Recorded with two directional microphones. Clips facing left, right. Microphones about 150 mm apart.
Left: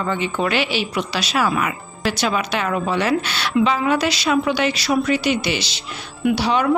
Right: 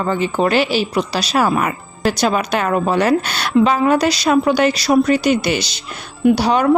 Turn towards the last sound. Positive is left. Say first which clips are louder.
# right 5 dB
turn(degrees=-45)  # may be behind; listen again after turning